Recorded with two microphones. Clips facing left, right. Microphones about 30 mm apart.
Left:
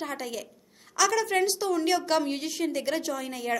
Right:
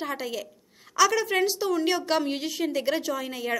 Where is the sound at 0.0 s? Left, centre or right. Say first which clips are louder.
Right 2 dB; centre.